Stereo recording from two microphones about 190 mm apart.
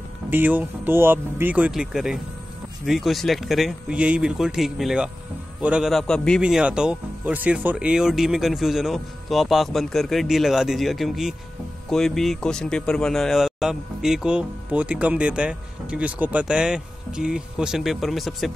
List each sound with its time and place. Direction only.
0.3 s speech: 10° right (ahead or behind)